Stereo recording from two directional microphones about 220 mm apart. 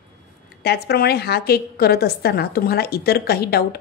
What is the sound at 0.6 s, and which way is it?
A woman's voice, 45° left (ahead or behind).